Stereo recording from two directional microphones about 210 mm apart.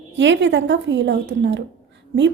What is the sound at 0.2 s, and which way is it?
A woman's voice, 60° right (ahead or behind).